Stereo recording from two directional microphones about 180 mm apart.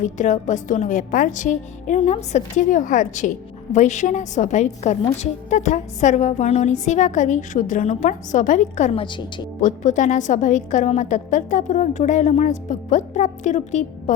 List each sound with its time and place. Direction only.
0.0 s a woman's voice: 45° left (ahead or behind); by 9.5 s 30° left (ahead or behind)
9.6 s a woman's voice: 45° left (ahead or behind)